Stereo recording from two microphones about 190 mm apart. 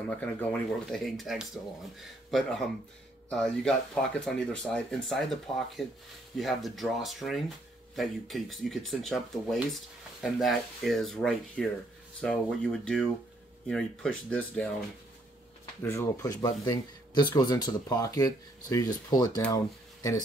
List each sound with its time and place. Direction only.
0.2 s speech: 5° left (ahead or behind)
15.8 s speech: 15° left (ahead or behind)